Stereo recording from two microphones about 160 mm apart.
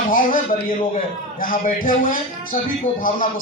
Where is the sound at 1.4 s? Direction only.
60° left (ahead or behind).